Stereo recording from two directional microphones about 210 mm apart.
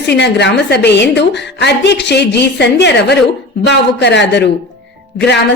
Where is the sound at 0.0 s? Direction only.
55° left (ahead or behind).